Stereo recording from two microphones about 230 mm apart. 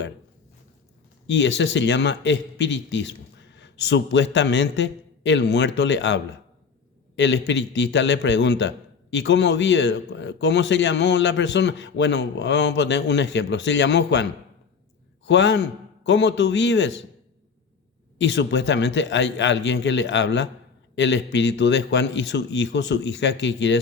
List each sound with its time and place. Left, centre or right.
1.3 s a man's voice: left
15.3 s a man's voice: left
18.2 s a man's voice: left